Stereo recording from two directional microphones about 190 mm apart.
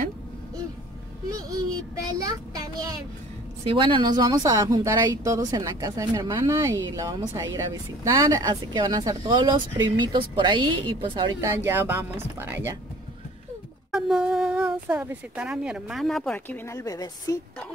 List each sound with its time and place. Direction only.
2.2 s a child's voice: 20° right (ahead or behind)
11.4 s speech: 10° right (ahead or behind)
13.9 s speech: 5° right (ahead or behind); by 17.4 s 20° left (ahead or behind)